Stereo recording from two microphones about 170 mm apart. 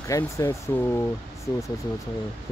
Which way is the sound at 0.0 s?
20° left (ahead or behind).